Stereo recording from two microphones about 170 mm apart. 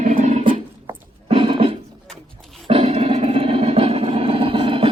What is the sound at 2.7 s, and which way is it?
Music, 35° right (ahead or behind).